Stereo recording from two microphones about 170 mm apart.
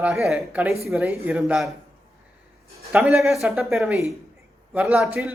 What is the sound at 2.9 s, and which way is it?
Speech, 5° right (ahead or behind).